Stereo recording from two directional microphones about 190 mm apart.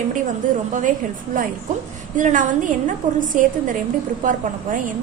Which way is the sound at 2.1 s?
45° right (ahead or behind).